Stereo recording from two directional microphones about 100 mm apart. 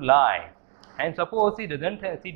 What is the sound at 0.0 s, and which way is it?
Speech, 20° right (ahead or behind).